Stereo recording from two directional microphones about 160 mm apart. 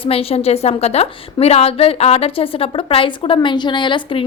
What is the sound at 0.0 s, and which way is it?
A woman's voice, 35° left (ahead or behind).